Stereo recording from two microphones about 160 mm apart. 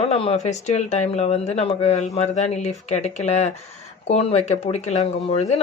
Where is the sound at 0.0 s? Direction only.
40° left (ahead or behind).